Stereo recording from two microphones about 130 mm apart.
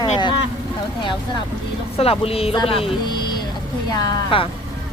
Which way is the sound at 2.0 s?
50° left (ahead or behind).